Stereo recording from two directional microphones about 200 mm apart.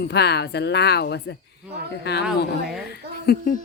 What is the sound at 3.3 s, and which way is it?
Speech, 40° left (ahead or behind).